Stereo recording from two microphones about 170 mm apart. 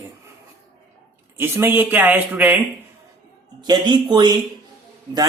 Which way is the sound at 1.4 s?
15° right (ahead or behind).